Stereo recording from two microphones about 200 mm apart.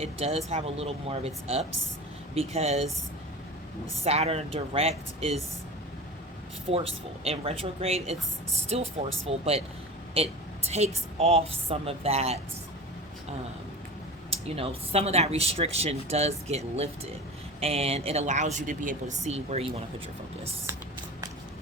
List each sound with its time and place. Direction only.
0.0 s speech: 30° right (ahead or behind)
4.0 s speech: 30° right (ahead or behind)
6.7 s speech: 30° right (ahead or behind)
10.7 s speech: 35° right (ahead or behind)
14.3 s speech: 30° right (ahead or behind)